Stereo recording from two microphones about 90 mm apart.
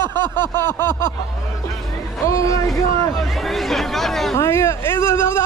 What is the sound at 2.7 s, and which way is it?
Speech, centre (ahead or behind).